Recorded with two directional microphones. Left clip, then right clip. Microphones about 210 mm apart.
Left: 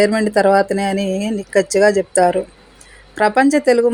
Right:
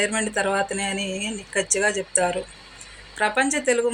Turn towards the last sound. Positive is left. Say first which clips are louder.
# left 9 dB
turn(degrees=50)  # may be behind; listen again after turning